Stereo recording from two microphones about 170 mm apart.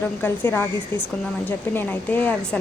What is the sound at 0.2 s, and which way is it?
Speech, 10° left (ahead or behind).